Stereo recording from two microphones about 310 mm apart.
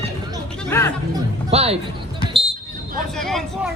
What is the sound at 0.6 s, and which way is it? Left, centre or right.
Music, centre.